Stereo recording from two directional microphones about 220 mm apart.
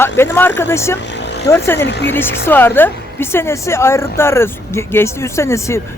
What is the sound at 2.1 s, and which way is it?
A woman's voice, 10° left (ahead or behind).